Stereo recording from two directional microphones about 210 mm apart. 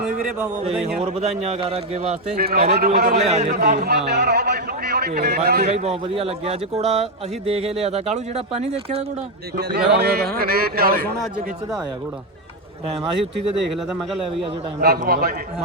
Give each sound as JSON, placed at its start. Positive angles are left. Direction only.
{"t": 0.0, "sound": "a sound", "side_deg": -5}
{"t": 1.0, "sound": "a man's voice", "side_deg": -30}
{"t": 2.3, "sound": "a man's voice", "side_deg": -45}
{"t": 3.2, "sound": "a man's voice", "side_deg": -30}
{"t": 3.6, "sound": "a man's voice", "side_deg": -45}
{"t": 5.7, "sound": "speech", "side_deg": -30}
{"t": 9.6, "sound": "a man's voice", "side_deg": -50}
{"t": 14.8, "sound": "a man's voice", "side_deg": -45}